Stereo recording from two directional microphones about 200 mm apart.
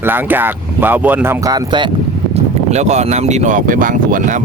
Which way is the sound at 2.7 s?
35° right (ahead or behind).